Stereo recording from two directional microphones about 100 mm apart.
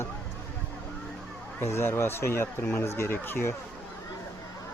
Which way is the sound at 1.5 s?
25° left (ahead or behind).